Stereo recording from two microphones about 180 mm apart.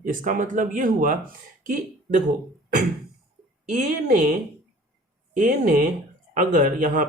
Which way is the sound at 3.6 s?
45° right (ahead or behind).